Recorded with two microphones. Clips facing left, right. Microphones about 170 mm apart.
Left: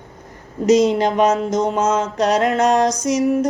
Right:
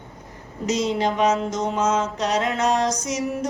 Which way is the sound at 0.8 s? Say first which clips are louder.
Left 6 dB; 45° left (ahead or behind).